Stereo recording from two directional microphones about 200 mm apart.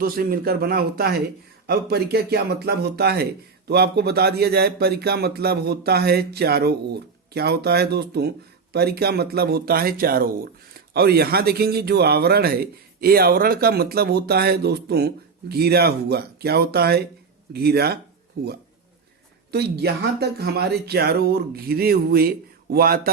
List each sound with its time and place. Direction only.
0.0 s speech: 50° right (ahead or behind)